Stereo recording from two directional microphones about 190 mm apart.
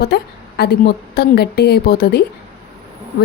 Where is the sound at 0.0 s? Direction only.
60° left (ahead or behind).